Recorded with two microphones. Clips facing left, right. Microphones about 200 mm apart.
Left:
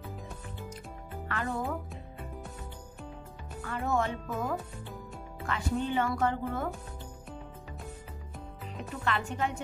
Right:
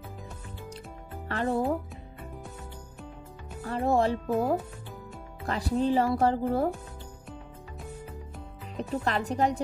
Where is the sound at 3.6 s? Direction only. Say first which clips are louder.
Right 6 dB; 30° right (ahead or behind).